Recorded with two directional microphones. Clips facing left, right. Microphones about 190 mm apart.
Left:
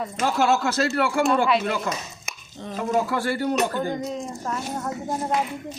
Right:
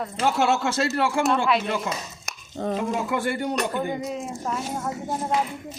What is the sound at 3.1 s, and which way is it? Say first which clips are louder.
Speech: left 1 dB; 20° right (ahead or behind).